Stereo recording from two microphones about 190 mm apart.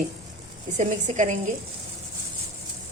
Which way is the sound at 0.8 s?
40° right (ahead or behind).